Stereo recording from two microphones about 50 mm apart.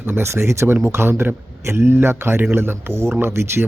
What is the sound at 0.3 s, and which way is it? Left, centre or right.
Speech, right.